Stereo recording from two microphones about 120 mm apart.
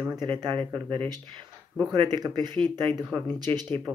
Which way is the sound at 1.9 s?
35° right (ahead or behind).